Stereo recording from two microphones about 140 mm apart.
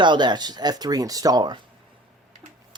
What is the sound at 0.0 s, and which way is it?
Speech, 35° right (ahead or behind).